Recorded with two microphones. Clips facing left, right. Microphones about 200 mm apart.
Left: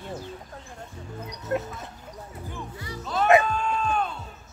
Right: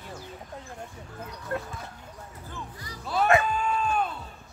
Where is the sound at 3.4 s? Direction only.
5° right (ahead or behind).